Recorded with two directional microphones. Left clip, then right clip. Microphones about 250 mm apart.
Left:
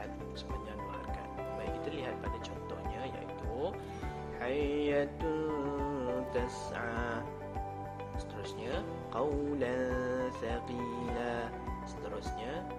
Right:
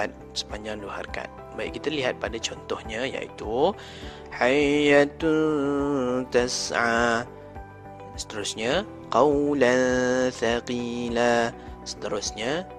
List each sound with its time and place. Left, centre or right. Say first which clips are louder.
0.0 s speech: right 13 dB; right
8.4 s speech: right 14 dB; right